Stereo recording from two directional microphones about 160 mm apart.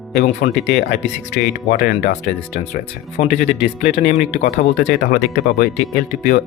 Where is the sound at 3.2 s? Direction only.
45° left (ahead or behind).